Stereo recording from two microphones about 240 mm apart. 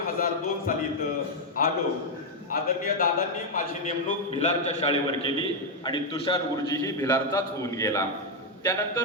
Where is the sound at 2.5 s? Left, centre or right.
Left.